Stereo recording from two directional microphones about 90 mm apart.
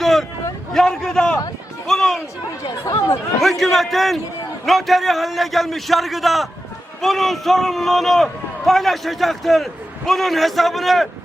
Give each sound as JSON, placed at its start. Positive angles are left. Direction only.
{"t": 0.0, "sound": "vehicle", "side_deg": 0}
{"t": 0.7, "sound": "a man's voice", "side_deg": 5}
{"t": 1.9, "sound": "a sound", "side_deg": 5}
{"t": 2.8, "sound": "speech", "side_deg": 35}
{"t": 3.4, "sound": "a man's voice", "side_deg": 0}